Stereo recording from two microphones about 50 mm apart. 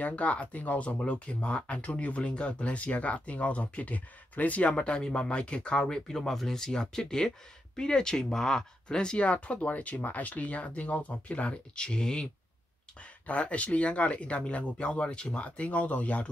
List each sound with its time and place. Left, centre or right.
0.0 s speech: left
13.3 s speech: left